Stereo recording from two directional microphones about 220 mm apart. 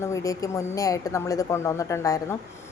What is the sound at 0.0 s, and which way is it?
A woman's voice, 15° left (ahead or behind).